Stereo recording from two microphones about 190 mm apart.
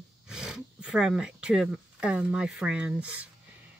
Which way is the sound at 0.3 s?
5° right (ahead or behind).